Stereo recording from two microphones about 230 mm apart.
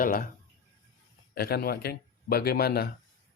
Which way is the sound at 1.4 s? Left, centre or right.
Left.